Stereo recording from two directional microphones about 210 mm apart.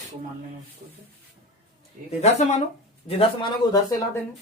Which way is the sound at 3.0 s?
25° left (ahead or behind).